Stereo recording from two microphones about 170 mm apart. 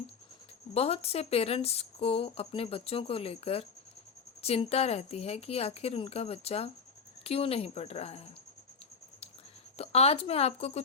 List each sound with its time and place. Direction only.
0.7 s speech: 35° left (ahead or behind)
9.7 s speech: 35° left (ahead or behind)